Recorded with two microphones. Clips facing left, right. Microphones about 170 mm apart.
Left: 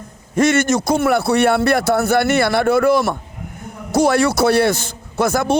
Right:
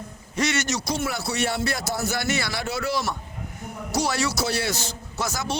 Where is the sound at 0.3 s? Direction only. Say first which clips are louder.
Left 10 dB; 50° left (ahead or behind).